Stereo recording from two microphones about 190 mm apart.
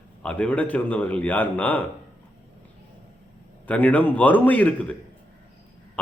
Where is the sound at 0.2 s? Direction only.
5° left (ahead or behind).